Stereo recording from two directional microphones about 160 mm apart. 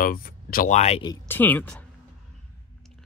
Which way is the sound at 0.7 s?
45° left (ahead or behind).